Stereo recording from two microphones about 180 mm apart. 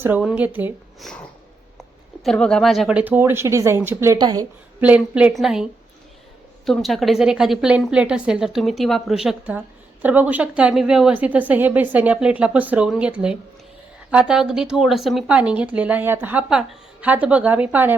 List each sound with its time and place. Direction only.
0.0 s speech: 10° right (ahead or behind)
0.9 s speech: centre (ahead or behind)
2.2 s speech: 5° left (ahead or behind); by 4.4 s 20° right (ahead or behind)
4.8 s speech: 5° right (ahead or behind)
6.7 s a woman's voice: centre (ahead or behind)